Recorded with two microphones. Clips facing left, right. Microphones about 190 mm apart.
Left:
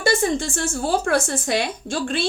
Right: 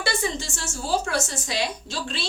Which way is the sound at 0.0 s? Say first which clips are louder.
Left 7 dB; 50° left (ahead or behind).